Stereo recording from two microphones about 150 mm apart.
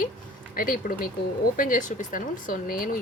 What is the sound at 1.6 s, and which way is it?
Speech, 65° left (ahead or behind).